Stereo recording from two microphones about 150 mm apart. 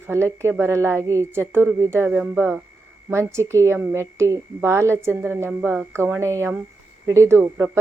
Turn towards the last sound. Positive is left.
turn(degrees=-20)  # may be behind; listen again after turning